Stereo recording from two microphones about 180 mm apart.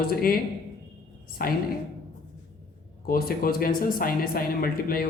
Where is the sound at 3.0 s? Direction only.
55° left (ahead or behind).